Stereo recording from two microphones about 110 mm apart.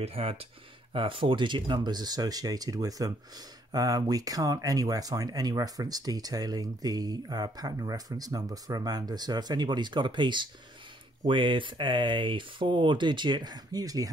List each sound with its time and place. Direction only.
0.0 s speech: 60° right (ahead or behind); by 14.0 s 35° right (ahead or behind)